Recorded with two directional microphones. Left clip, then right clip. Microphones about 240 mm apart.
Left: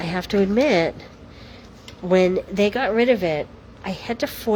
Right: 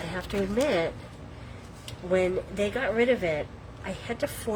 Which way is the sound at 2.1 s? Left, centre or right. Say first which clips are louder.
Left 8 dB; left.